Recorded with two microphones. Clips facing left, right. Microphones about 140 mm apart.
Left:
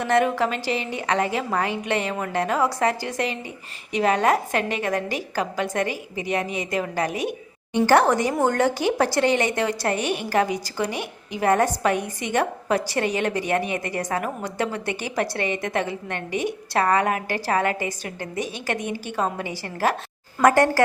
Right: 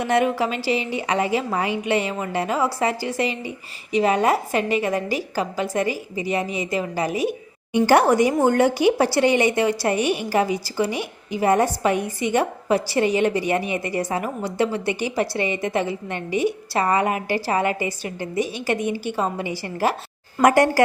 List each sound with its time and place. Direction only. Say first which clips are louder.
0.0 s a woman's voice: even; 10° right (ahead or behind)
16.1 s a woman's voice: right 4 dB; 50° left (ahead or behind)
16.7 s a woman's voice: left 2 dB; 10° right (ahead or behind)